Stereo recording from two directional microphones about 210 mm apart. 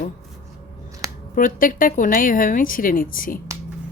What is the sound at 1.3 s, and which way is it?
A woman's voice, 40° left (ahead or behind).